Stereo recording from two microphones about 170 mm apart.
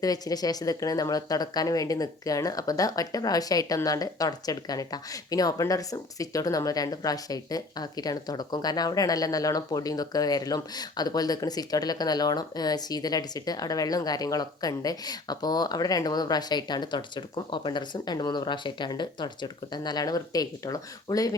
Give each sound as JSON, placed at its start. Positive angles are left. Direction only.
{"t": 0.0, "sound": "speech", "side_deg": 20}